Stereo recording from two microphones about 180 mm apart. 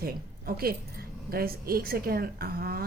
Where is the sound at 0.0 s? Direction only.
55° right (ahead or behind).